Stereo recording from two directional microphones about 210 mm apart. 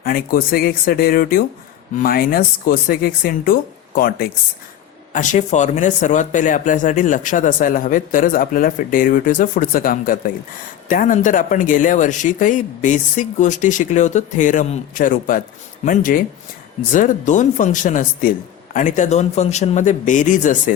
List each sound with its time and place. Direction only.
0.0 s speech: 45° left (ahead or behind)